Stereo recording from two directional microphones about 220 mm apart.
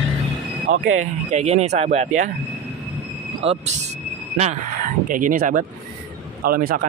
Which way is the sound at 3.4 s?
25° right (ahead or behind).